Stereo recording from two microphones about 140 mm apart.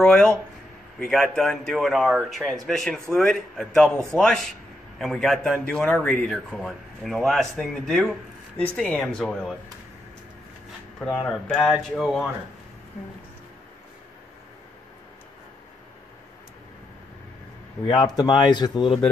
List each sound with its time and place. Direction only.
0.0 s a sound: 5° left (ahead or behind)
0.9 s a man's voice: 5° left (ahead or behind)
11.1 s a man's voice: centre (ahead or behind)
17.8 s speech: 30° left (ahead or behind)